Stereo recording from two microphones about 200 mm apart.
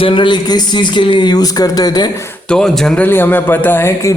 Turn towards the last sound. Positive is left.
turn(degrees=10)  # may be behind; listen again after turning